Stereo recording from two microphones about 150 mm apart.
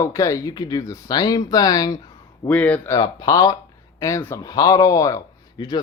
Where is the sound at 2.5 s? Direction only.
10° left (ahead or behind).